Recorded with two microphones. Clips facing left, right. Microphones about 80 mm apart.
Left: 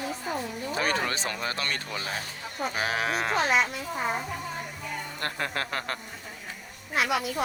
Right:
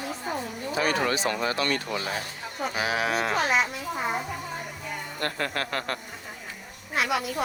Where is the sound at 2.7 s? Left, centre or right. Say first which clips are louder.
Right 2 dB; left.